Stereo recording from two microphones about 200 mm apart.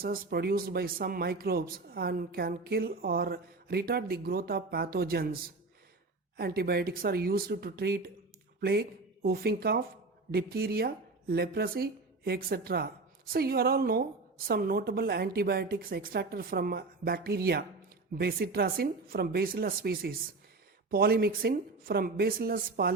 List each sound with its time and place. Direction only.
0.0 s speech: 50° right (ahead or behind)
9.2 s speech: 50° right (ahead or behind)